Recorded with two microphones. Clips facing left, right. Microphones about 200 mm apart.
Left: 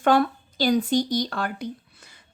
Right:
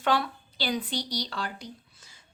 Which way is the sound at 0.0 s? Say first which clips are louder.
Left 7 dB; 50° left (ahead or behind).